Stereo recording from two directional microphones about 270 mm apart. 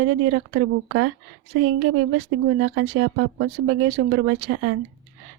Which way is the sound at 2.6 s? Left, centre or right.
Right.